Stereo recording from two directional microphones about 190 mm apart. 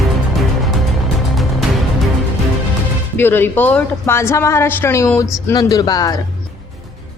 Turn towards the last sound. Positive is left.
turn(degrees=20)  # may be behind; listen again after turning